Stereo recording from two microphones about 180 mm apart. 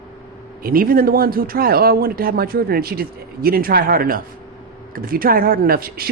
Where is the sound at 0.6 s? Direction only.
55° right (ahead or behind).